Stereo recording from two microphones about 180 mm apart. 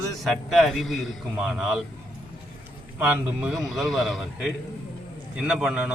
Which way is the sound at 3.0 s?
10° right (ahead or behind).